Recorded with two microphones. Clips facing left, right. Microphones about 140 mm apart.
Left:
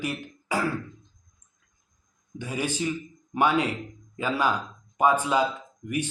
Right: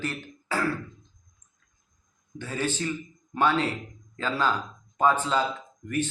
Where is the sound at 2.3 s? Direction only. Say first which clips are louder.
Even; 15° left (ahead or behind).